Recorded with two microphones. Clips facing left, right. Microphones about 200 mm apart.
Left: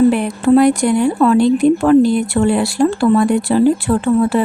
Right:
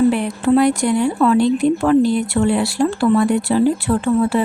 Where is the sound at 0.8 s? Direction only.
50° left (ahead or behind).